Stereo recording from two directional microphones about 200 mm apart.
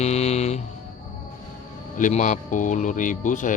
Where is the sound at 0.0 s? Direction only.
35° left (ahead or behind).